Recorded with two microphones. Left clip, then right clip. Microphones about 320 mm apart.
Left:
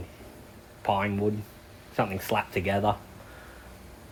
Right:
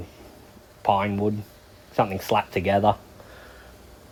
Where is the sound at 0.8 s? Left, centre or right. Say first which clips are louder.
Right 5 dB; right.